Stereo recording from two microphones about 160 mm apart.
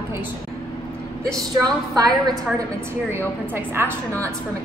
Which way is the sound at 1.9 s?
25° right (ahead or behind).